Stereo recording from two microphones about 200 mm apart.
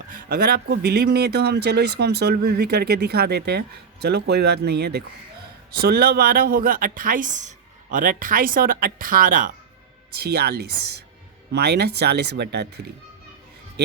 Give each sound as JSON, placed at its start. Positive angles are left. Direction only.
{"t": 0.1, "sound": "speech", "side_deg": -45}